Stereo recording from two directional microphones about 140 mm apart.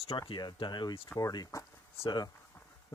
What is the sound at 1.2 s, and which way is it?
Speech, 25° left (ahead or behind).